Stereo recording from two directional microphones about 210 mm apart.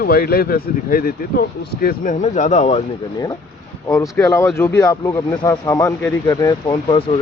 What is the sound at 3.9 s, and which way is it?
Speech, 15° left (ahead or behind).